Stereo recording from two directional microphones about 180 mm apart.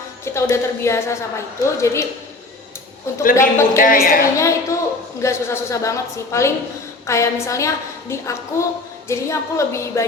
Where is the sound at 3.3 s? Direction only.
15° left (ahead or behind).